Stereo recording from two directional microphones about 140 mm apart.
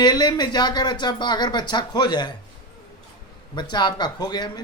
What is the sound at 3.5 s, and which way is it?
Speech, 30° left (ahead or behind).